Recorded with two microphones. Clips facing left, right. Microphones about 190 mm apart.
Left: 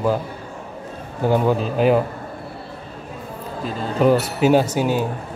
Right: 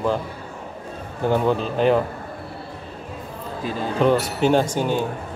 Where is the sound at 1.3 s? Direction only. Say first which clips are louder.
Left 2 dB; 5° left (ahead or behind).